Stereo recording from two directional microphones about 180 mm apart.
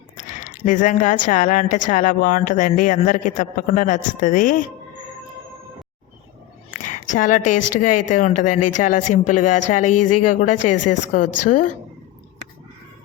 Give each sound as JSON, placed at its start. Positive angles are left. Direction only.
{"t": 0.2, "sound": "speech", "side_deg": 45}
{"t": 7.2, "sound": "speech", "side_deg": 45}